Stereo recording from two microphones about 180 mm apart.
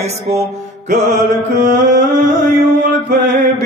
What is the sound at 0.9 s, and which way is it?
Music, 40° right (ahead or behind).